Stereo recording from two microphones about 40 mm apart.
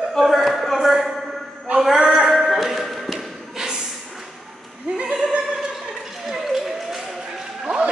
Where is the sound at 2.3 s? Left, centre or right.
Centre.